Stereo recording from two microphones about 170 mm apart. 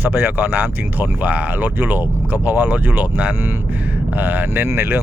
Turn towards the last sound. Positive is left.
turn(degrees=-15)  # may be behind; listen again after turning